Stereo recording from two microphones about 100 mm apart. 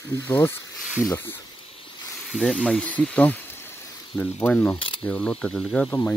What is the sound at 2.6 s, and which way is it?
Speech, 10° left (ahead or behind).